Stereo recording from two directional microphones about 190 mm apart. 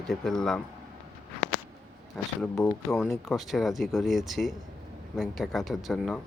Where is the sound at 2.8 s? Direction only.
Centre (ahead or behind).